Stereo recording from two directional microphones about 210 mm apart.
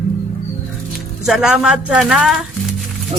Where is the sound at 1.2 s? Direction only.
Centre (ahead or behind).